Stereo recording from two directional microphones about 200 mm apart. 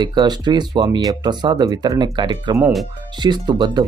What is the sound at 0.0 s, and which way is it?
Speech, 20° right (ahead or behind).